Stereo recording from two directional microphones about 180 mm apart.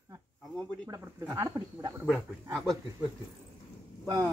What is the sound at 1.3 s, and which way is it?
Speech, 20° right (ahead or behind).